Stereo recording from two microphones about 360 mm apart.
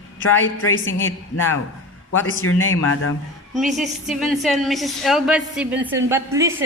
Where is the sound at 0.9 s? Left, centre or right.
Centre.